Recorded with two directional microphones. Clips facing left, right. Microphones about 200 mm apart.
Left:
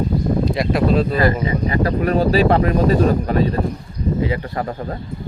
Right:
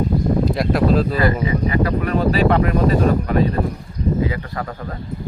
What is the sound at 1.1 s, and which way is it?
Speech, 35° left (ahead or behind).